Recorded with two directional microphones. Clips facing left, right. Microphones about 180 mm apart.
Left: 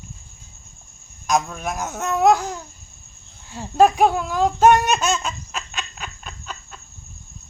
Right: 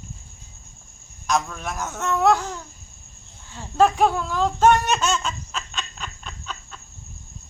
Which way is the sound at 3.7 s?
15° left (ahead or behind).